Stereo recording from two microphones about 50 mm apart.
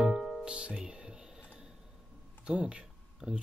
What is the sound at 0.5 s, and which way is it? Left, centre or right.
Music, centre.